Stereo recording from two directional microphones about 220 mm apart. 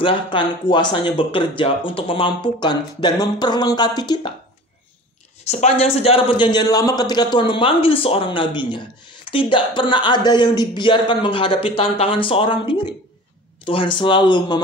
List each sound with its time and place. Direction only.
0.0 s a man's voice: 20° left (ahead or behind)
5.4 s a man's voice: 30° left (ahead or behind)